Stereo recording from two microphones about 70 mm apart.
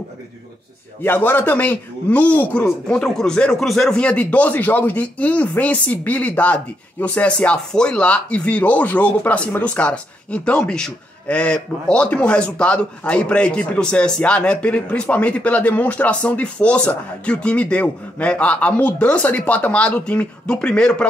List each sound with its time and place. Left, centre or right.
1.0 s speech: left
3.0 s a man's voice: centre